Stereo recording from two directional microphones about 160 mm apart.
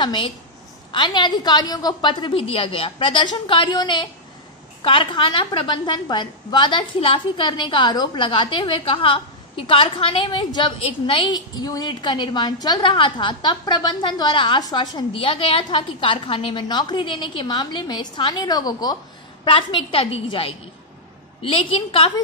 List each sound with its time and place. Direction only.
0.0 s a woman's voice: 30° left (ahead or behind)